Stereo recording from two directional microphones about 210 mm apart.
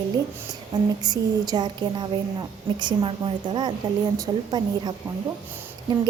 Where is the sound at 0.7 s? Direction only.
20° right (ahead or behind).